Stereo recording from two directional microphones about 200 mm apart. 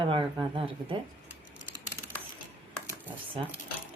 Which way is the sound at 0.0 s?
25° right (ahead or behind).